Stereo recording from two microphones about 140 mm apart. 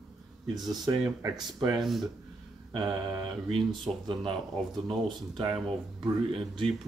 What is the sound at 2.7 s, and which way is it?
Mantra, 30° right (ahead or behind).